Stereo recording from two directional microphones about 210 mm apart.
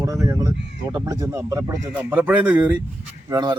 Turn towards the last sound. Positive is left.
turn(degrees=-20)  # may be behind; listen again after turning